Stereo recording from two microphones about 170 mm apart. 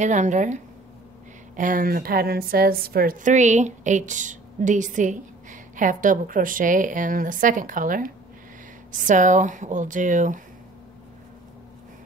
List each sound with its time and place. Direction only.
0.0 s a woman's voice: 45° right (ahead or behind)
1.6 s a woman's voice: 55° right (ahead or behind)